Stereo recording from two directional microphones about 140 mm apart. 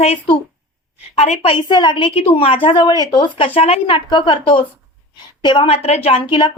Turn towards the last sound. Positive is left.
turn(degrees=40)  # may be behind; listen again after turning